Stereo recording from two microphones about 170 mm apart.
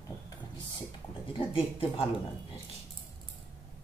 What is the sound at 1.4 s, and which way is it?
Speech, 30° left (ahead or behind).